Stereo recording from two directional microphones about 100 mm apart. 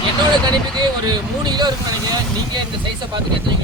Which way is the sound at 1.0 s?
45° right (ahead or behind).